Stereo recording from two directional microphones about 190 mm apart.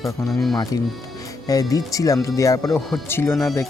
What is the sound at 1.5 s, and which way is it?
Speech, 20° left (ahead or behind).